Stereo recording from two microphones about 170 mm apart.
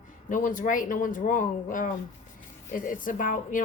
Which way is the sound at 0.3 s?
50° left (ahead or behind).